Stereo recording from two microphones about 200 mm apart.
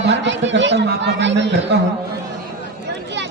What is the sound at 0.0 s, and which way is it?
A man's voice, 60° right (ahead or behind).